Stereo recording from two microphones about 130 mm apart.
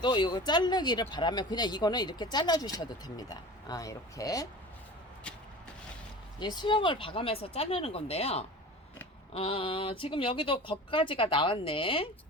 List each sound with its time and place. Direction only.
0.0 s speech: 35° left (ahead or behind)
6.4 s speech: 35° left (ahead or behind)